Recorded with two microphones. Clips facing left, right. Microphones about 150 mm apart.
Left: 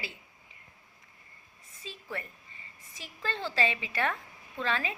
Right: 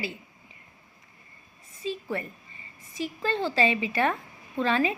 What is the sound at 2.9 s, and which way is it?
A woman's voice, 5° right (ahead or behind).